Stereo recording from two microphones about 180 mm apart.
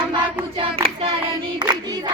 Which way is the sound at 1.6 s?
20° right (ahead or behind).